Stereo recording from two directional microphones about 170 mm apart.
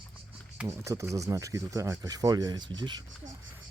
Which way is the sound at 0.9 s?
20° right (ahead or behind).